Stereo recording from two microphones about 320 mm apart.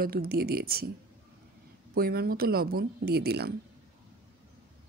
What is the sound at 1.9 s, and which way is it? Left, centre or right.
A woman's voice, right.